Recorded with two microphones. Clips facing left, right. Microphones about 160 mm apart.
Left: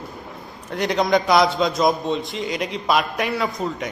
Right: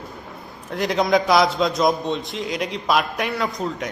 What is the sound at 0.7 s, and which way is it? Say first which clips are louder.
A man's voice: even; centre (ahead or behind).